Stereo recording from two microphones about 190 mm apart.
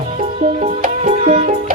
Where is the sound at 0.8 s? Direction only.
35° right (ahead or behind).